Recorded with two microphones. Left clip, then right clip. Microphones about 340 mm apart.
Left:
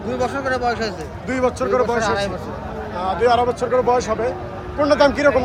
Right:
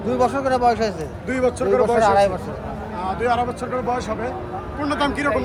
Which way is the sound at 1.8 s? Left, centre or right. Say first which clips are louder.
Right 4 dB; centre.